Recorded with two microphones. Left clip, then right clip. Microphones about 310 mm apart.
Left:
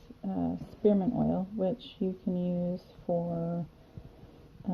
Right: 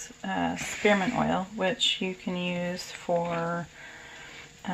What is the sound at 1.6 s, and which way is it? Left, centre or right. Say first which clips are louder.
Speech: right 8 dB; centre.